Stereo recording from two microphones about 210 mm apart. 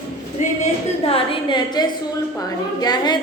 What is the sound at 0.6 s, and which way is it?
A woman's voice, 25° left (ahead or behind).